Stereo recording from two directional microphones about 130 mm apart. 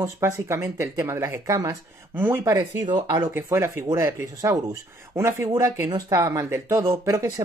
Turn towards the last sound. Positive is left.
turn(degrees=-25)  # may be behind; listen again after turning